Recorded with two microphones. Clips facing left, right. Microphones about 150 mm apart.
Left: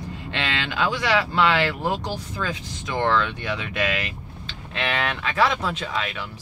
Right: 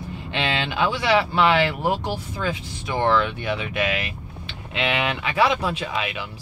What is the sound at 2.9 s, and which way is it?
Speech, 10° right (ahead or behind).